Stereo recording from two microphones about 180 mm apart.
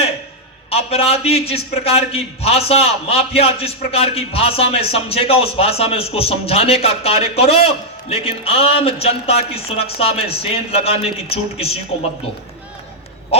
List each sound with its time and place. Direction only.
0.7 s a man's voice: 35° left (ahead or behind)